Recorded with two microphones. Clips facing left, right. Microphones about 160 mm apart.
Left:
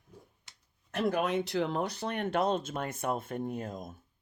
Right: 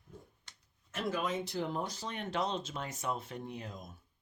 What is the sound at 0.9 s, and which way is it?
Speech, 60° left (ahead or behind).